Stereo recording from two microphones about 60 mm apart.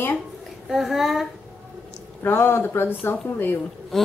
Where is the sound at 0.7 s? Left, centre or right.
Centre.